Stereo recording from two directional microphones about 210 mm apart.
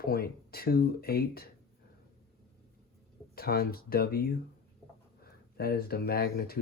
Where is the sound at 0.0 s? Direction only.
45° left (ahead or behind).